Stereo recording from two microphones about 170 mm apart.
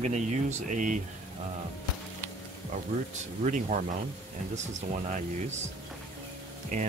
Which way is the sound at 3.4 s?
45° right (ahead or behind).